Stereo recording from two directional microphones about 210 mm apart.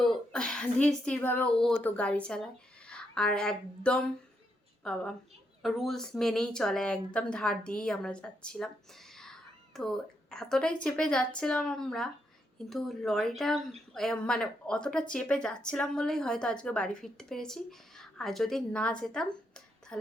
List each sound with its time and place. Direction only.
0.0 s a woman's voice: 5° left (ahead or behind)
9.1 s whispering: centre (ahead or behind)
10.8 s a woman's voice: 5° left (ahead or behind)